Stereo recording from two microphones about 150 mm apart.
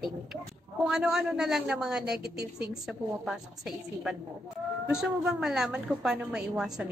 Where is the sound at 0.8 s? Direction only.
5° right (ahead or behind).